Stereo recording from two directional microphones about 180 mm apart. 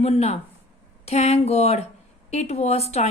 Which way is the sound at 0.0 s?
35° left (ahead or behind).